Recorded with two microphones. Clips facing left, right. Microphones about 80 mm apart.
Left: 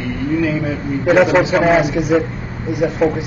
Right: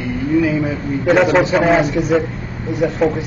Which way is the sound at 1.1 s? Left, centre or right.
Centre.